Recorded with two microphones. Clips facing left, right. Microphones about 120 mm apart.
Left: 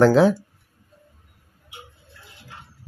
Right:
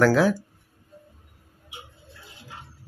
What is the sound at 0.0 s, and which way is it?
Speech, 25° left (ahead or behind).